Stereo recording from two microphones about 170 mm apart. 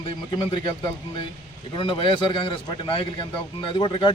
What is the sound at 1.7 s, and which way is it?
A man's voice, 30° left (ahead or behind).